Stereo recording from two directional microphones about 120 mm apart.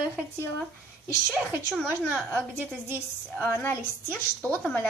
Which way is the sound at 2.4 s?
15° right (ahead or behind).